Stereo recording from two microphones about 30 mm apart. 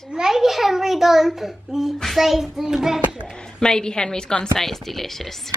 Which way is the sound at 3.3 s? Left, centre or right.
Left.